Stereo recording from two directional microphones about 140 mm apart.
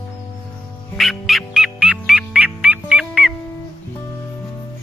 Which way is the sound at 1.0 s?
Centre (ahead or behind).